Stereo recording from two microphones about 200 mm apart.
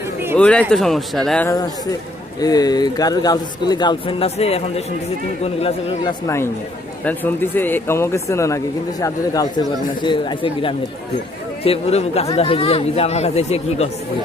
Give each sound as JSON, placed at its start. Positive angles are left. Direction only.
{"t": 0.3, "sound": "speech", "side_deg": 5}
{"t": 1.5, "sound": "a man's voice", "side_deg": 20}
{"t": 6.2, "sound": "a man's voice", "side_deg": 15}